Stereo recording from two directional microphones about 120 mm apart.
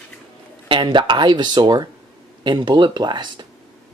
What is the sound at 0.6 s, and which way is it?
Speech, 40° right (ahead or behind).